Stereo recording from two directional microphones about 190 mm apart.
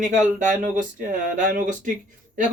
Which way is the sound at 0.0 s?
40° right (ahead or behind).